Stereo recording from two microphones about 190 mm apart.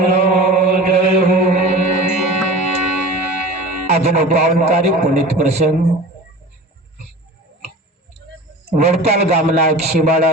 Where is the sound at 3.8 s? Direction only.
35° right (ahead or behind).